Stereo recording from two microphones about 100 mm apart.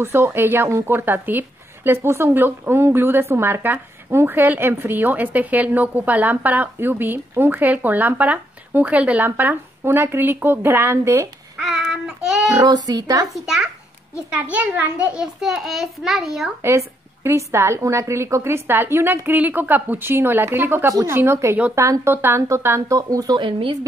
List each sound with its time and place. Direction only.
0.0 s a woman's voice: 25° right (ahead or behind)
11.6 s child singing: 5° right (ahead or behind)
12.5 s speech: 40° right (ahead or behind)
14.1 s a child's voice: 15° right (ahead or behind)
16.6 s a woman's voice: 25° right (ahead or behind)
23.3 s speech: 55° right (ahead or behind)